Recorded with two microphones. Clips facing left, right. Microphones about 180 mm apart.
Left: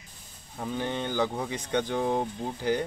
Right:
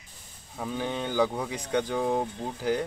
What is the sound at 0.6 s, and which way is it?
Speech, centre (ahead or behind).